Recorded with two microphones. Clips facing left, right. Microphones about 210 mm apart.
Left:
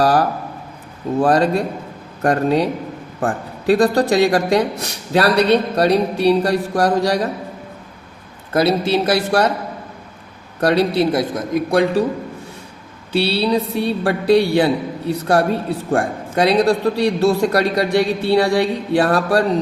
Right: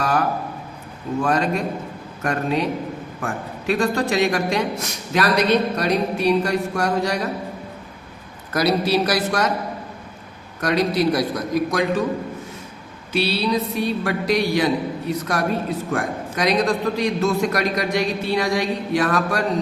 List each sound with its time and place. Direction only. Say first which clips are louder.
0.0 s a sound: left 6 dB; 35° left (ahead or behind)
1.2 s a man's voice: left 6 dB; 35° left (ahead or behind)
8.5 s a man's voice: left 3 dB; 25° left (ahead or behind)
10.6 s a man's voice: left 4 dB; 30° left (ahead or behind)
13.1 s a man's voice: left 4 dB; 30° left (ahead or behind)